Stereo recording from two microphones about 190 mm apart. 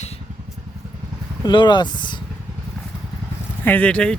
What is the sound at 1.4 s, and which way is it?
Speech, 25° left (ahead or behind).